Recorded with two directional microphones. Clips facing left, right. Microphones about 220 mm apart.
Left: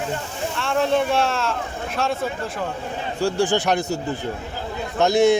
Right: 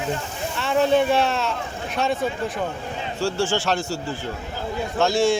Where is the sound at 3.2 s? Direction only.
15° left (ahead or behind).